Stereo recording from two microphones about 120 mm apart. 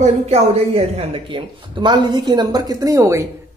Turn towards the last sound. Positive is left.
turn(degrees=-25)  # may be behind; listen again after turning